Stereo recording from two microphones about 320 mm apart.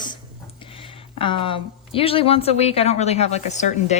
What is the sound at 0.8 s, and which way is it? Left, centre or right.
A woman's voice, centre.